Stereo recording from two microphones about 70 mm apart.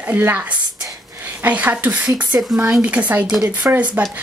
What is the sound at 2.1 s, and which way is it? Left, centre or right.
Speech, right.